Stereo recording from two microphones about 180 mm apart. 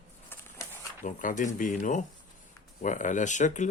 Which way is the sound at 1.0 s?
45° left (ahead or behind).